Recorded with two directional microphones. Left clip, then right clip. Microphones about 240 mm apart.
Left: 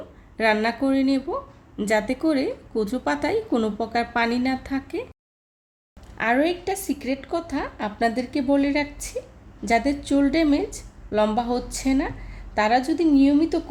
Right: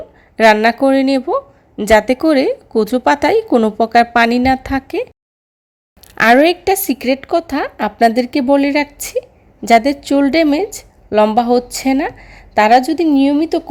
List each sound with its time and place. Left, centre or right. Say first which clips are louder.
0.3 s speech: right 12 dB; right
6.1 s speech: right 12 dB; right